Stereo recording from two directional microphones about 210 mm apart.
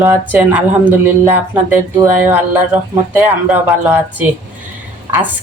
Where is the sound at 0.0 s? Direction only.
10° right (ahead or behind).